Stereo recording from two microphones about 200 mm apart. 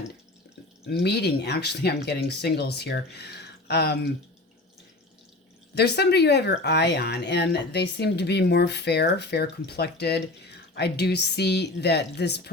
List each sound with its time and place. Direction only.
1.0 s speech: 55° left (ahead or behind)
5.7 s speech: 55° left (ahead or behind)